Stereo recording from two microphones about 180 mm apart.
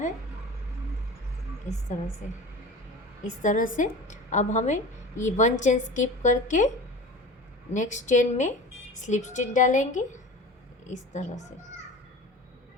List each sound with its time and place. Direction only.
3.2 s a woman's voice: 45° left (ahead or behind)
7.7 s a woman's voice: 45° left (ahead or behind)